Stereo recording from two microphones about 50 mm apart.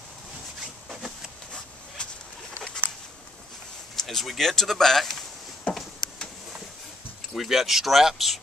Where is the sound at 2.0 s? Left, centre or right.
Centre.